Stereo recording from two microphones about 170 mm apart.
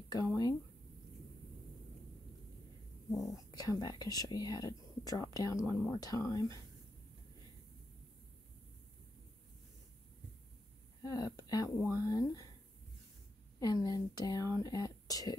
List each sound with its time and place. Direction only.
0.1 s speech: 20° left (ahead or behind)
3.2 s speech: 20° left (ahead or behind)
11.0 s speech: 20° left (ahead or behind)
13.6 s speech: 20° left (ahead or behind)